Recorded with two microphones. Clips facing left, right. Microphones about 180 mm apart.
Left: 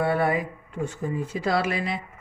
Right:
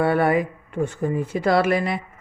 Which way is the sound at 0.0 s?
65° right (ahead or behind).